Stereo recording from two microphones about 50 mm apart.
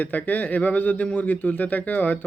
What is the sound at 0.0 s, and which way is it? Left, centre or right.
Speech, left.